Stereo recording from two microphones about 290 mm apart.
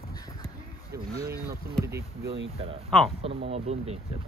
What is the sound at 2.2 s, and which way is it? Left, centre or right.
Speech, right.